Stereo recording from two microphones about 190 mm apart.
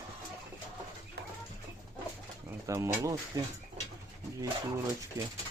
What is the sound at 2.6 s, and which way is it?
Speech, 15° right (ahead or behind).